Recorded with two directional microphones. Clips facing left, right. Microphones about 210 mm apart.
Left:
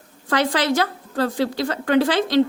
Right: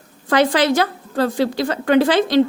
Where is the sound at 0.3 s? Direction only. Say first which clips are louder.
Right 5 dB; 15° right (ahead or behind).